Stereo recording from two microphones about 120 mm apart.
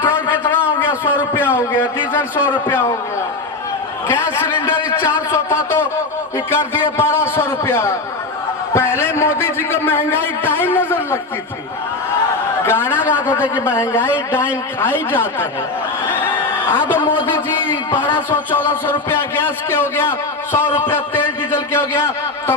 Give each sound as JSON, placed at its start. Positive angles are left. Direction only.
{"t": 0.0, "sound": "a sound", "side_deg": 20}
{"t": 2.6, "sound": "speech", "side_deg": 20}
{"t": 4.1, "sound": "a man's voice", "side_deg": 20}
{"t": 12.6, "sound": "a man's voice", "side_deg": 20}
{"t": 16.2, "sound": "a sound", "side_deg": 20}
{"t": 17.2, "sound": "a man's voice", "side_deg": 40}
{"t": 17.9, "sound": "speech", "side_deg": 15}